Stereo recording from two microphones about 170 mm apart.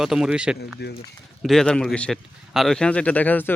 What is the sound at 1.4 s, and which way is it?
A man's voice, centre (ahead or behind).